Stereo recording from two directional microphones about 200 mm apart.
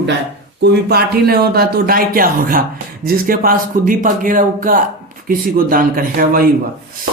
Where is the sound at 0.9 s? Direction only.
50° right (ahead or behind).